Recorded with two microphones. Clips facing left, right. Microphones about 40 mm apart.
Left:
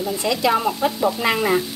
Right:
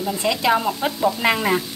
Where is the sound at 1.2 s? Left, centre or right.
Centre.